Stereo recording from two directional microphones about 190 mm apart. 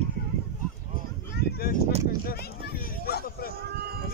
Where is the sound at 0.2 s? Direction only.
55° left (ahead or behind).